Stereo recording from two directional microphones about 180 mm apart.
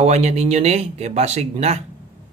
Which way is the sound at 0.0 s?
35° right (ahead or behind).